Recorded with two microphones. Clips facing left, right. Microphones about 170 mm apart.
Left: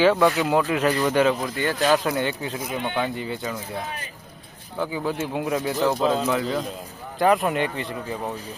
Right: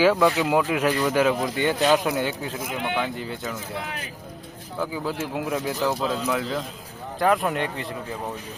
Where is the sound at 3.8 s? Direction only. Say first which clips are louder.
Left 1 dB; 90° right.